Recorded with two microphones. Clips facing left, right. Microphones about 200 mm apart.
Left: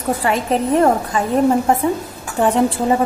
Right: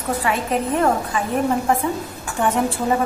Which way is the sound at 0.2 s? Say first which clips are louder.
Left 3 dB; 35° left (ahead or behind).